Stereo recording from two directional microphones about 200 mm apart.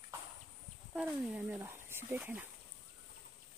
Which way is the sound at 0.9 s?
5° right (ahead or behind).